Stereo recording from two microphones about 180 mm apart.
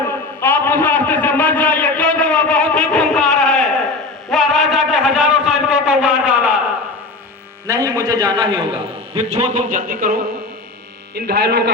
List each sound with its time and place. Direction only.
0.3 s a sound: 10° left (ahead or behind); by 6.6 s 5° right (ahead or behind)
7.7 s a man's voice: 20° right (ahead or behind); by 10.2 s 55° right (ahead or behind)
11.1 s speech: 65° right (ahead or behind)